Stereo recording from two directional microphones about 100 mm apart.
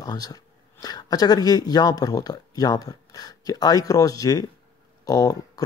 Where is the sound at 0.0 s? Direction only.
40° left (ahead or behind).